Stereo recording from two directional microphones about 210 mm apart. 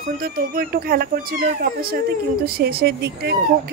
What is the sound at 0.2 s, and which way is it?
A woman's voice, 45° right (ahead or behind).